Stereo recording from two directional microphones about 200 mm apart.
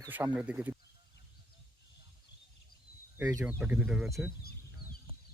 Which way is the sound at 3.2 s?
10° right (ahead or behind).